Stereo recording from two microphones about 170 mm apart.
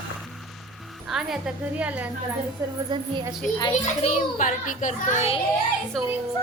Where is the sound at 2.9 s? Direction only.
25° right (ahead or behind).